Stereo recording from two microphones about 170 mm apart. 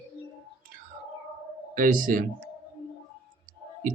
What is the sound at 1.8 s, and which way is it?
Speech, 50° right (ahead or behind).